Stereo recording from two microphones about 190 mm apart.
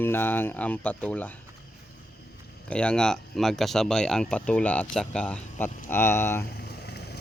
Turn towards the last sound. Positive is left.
turn(degrees=60)  # may be behind; listen again after turning